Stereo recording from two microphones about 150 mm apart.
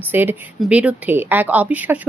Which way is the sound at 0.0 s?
15° right (ahead or behind).